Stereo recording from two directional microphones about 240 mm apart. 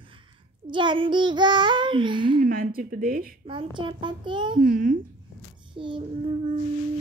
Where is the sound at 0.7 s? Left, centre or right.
Centre.